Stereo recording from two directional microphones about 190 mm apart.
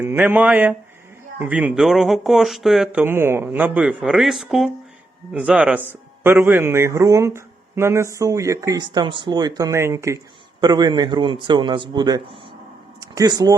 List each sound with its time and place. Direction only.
0.0 s a man's voice: 10° right (ahead or behind)